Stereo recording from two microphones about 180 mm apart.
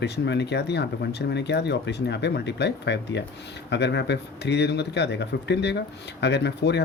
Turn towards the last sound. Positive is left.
turn(degrees=70)  # may be behind; listen again after turning